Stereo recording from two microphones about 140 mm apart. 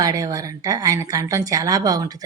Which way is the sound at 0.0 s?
25° right (ahead or behind).